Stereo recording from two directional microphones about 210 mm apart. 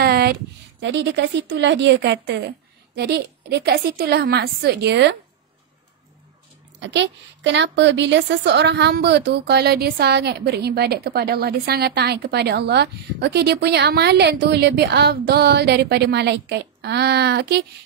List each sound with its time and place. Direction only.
0.0 s a woman's voice: 50° right (ahead or behind)
6.8 s a woman's voice: 55° right (ahead or behind)